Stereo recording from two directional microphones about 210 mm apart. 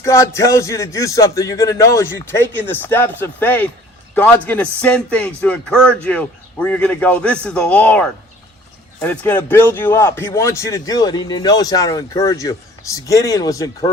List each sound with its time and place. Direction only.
0.0 s a man's voice: 15° left (ahead or behind)